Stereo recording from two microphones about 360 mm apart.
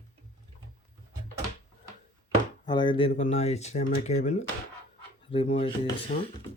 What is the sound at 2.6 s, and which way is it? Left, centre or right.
Speech, centre.